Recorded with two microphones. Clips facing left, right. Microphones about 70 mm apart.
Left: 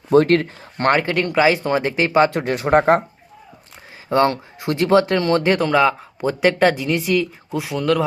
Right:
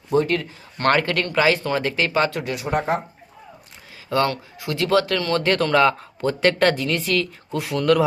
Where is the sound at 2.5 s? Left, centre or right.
Left.